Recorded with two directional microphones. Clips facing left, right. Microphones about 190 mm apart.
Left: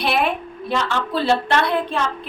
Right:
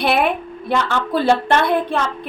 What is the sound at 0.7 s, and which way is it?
A woman's voice, 55° right (ahead or behind).